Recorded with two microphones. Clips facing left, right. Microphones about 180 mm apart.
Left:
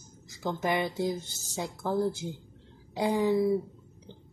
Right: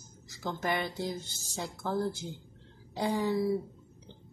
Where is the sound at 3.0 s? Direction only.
10° left (ahead or behind).